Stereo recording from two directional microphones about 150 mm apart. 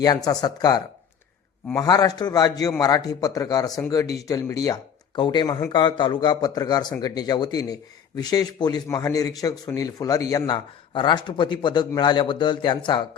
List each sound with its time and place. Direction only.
0.0 s a man's voice: 25° left (ahead or behind)